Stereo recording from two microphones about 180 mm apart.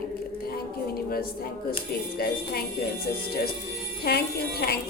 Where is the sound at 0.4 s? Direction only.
55° left (ahead or behind).